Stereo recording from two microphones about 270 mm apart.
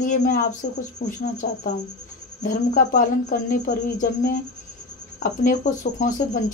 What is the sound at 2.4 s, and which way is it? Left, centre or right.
Speech, left.